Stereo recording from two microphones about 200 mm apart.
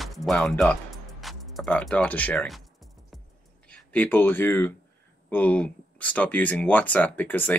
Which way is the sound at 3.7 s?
10° left (ahead or behind).